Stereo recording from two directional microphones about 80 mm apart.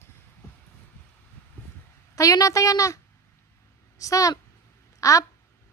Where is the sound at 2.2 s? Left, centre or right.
Left.